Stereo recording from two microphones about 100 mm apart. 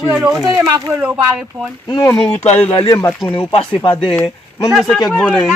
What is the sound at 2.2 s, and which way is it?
Speech, 85° left.